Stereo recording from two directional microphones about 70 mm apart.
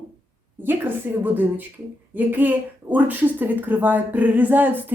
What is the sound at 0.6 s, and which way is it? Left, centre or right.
A woman's voice, right.